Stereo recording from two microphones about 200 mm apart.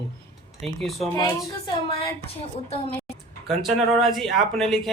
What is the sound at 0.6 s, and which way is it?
Speech, centre (ahead or behind).